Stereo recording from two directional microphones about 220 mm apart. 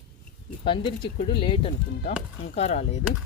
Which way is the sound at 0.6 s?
25° left (ahead or behind).